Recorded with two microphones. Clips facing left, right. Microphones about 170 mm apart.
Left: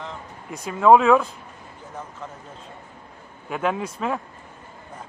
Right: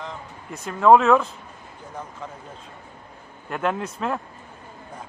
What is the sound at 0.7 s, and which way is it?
Speech, 5° left (ahead or behind).